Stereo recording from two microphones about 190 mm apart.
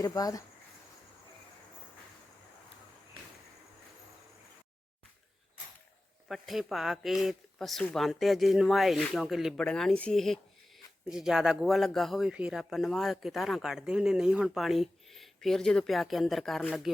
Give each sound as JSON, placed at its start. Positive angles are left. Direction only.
{"t": 0.0, "sound": "speech", "side_deg": 20}
{"t": 6.2, "sound": "speech", "side_deg": 0}